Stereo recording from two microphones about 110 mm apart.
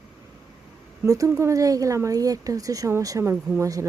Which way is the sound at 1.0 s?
30° right (ahead or behind).